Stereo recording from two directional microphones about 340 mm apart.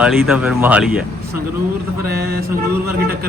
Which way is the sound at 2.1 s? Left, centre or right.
Right.